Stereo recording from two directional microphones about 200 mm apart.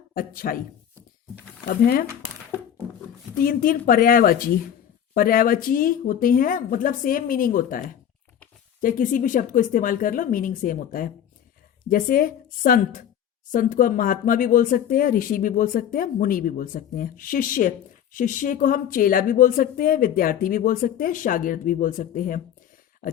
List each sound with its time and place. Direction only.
0.1 s speech: 45° left (ahead or behind)
1.6 s speech: 45° left (ahead or behind)
3.3 s speech: 45° left (ahead or behind)